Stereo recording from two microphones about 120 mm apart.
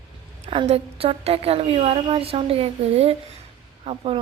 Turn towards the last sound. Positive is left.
turn(degrees=-55)  # may be behind; listen again after turning